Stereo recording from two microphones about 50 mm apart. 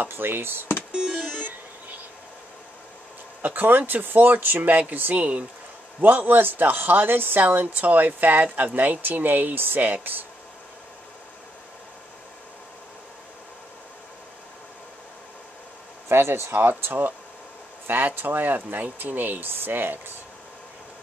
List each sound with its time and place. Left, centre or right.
0.0 s speech: right
3.4 s speech: right
16.1 s speech: right